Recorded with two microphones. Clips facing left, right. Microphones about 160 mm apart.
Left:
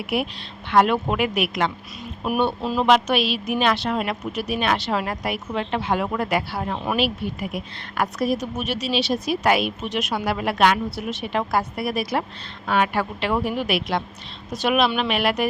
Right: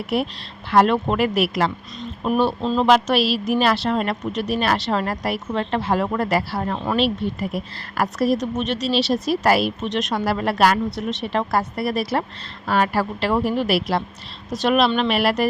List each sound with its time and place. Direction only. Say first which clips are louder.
0.0 s a woman's voice: right 2 dB; centre (ahead or behind)